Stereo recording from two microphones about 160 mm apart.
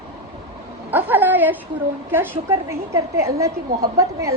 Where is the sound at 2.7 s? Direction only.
20° right (ahead or behind).